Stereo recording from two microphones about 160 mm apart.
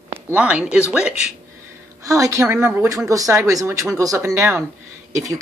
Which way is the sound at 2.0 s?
20° right (ahead or behind).